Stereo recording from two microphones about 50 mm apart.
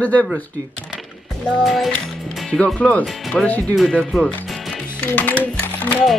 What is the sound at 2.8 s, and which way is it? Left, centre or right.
Speech, left.